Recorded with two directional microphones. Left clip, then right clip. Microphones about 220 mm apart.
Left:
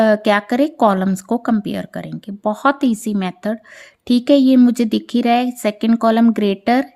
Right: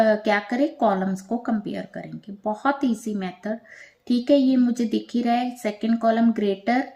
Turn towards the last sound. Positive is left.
turn(degrees=45)  # may be behind; listen again after turning